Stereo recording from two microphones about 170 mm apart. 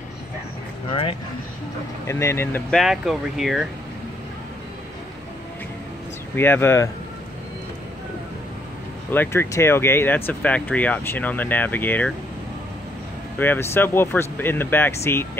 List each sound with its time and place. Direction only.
0.8 s speech: 30° left (ahead or behind)
2.0 s speech: 15° left (ahead or behind)
2.8 s speech: centre (ahead or behind)
6.3 s speech: 10° left (ahead or behind)
9.1 s speech: 10° left (ahead or behind)
13.4 s speech: 15° left (ahead or behind)